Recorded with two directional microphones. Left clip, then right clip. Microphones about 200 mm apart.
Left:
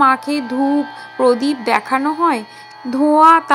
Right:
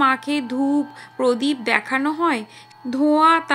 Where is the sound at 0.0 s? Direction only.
10° left (ahead or behind).